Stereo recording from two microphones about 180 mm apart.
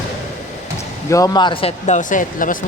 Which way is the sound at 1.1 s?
20° left (ahead or behind).